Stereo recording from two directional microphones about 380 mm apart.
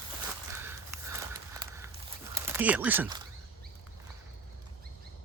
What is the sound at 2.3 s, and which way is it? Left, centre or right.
Speech, centre.